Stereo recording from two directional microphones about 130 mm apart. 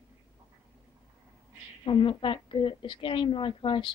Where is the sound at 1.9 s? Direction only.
40° left (ahead or behind).